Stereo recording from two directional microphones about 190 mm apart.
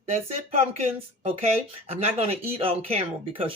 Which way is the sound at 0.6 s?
35° right (ahead or behind).